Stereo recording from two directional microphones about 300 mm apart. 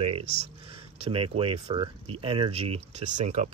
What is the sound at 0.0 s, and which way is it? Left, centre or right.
Speech, right.